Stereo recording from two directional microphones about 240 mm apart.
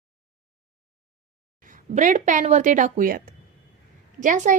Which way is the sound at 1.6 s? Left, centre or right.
Right.